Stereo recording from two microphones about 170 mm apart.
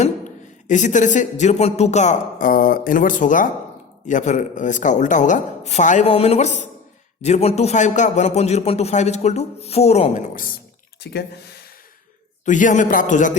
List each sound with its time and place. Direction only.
0.0 s a man's voice: 45° left (ahead or behind)
11.0 s speech: 75° left (ahead or behind)
12.5 s speech: 45° left (ahead or behind)